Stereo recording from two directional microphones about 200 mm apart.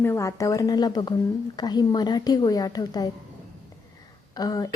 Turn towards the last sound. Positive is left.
turn(degrees=20)  # may be behind; listen again after turning